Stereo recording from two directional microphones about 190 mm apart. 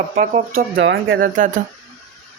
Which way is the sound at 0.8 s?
80° right.